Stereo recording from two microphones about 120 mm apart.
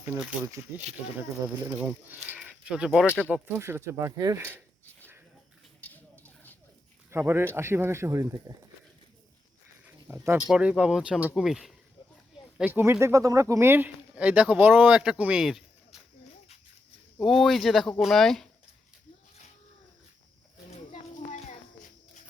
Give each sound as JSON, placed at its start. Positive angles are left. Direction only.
{"t": 1.6, "sound": "speech", "side_deg": -15}
{"t": 3.2, "sound": "speech", "side_deg": -15}
{"t": 5.8, "sound": "a sound", "side_deg": 15}
{"t": 7.1, "sound": "speech", "side_deg": -20}
{"t": 10.1, "sound": "speech", "side_deg": -10}
{"t": 12.8, "sound": "speech", "side_deg": -20}
{"t": 17.2, "sound": "speech", "side_deg": 0}
{"t": 20.7, "sound": "children playing", "side_deg": 80}